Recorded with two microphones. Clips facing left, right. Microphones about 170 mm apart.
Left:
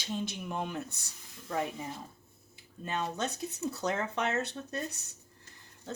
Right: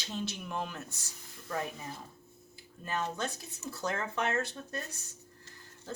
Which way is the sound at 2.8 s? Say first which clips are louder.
Left 1 dB; 20° left (ahead or behind).